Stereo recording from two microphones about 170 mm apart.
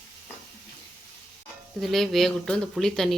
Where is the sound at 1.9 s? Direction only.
Centre (ahead or behind).